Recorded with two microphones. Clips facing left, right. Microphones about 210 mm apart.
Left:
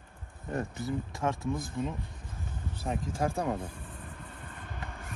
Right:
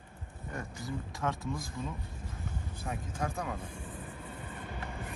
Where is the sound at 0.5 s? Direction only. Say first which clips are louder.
Left 7 dB; 30° left (ahead or behind).